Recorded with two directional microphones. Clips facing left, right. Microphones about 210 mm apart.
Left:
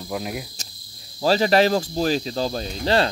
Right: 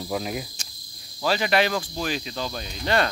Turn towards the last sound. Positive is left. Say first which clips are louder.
# left 4 dB
turn(degrees=35)  # may be behind; listen again after turning